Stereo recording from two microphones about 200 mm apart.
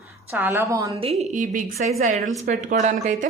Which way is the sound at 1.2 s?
40° right (ahead or behind).